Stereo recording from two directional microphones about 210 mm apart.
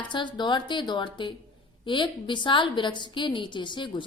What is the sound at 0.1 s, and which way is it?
A woman's voice, 20° left (ahead or behind).